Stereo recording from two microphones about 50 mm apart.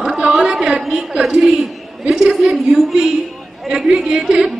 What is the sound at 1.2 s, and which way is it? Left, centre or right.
A woman's voice, centre.